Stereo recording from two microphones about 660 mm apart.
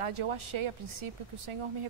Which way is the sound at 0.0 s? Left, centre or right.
Right.